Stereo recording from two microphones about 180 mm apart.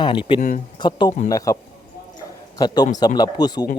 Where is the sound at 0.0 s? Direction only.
30° left (ahead or behind).